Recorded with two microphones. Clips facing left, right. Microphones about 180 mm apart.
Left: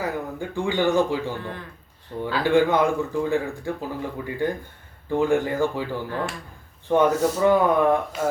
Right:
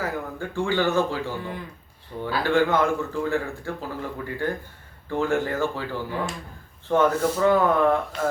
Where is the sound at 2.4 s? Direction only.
15° left (ahead or behind).